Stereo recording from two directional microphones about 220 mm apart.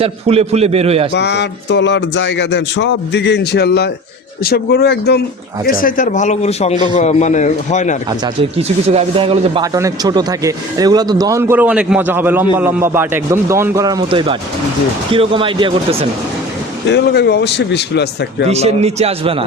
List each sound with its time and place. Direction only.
0.0 s speech: 25° right (ahead or behind)
1.1 s speech: 50° left (ahead or behind)
5.8 s a man's voice: 35° left (ahead or behind)
8.2 s speech: 25° right (ahead or behind)
9.7 s speech: 15° right (ahead or behind)
16.9 s speech: 50° left (ahead or behind)
18.4 s speech: 30° right (ahead or behind)